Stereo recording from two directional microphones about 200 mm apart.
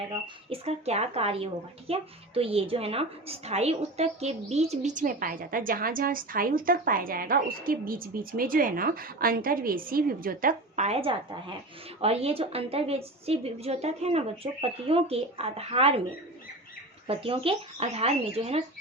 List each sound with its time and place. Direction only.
0.5 s a woman's voice: 30° right (ahead or behind)
17.1 s a woman's voice: 25° right (ahead or behind)